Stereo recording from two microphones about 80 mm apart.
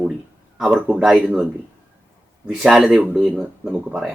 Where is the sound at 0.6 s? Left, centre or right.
Centre.